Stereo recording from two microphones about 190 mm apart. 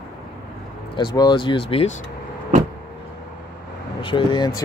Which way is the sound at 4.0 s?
25° left (ahead or behind).